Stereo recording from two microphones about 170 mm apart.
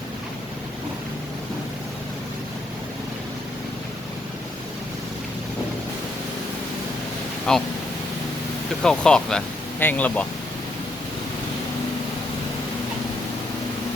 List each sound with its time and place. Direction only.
7.5 s speech: 5° left (ahead or behind)
8.8 s speech: 5° left (ahead or behind)